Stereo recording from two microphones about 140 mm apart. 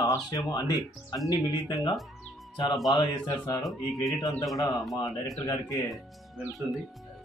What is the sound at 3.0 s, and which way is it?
Speech, 30° left (ahead or behind).